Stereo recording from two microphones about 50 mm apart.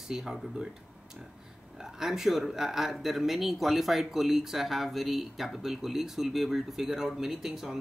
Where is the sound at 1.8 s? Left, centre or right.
Centre.